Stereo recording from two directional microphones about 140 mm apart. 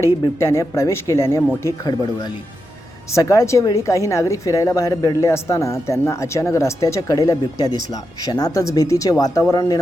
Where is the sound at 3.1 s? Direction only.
25° left (ahead or behind).